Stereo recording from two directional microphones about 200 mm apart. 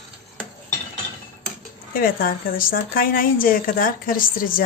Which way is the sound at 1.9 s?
45° left (ahead or behind).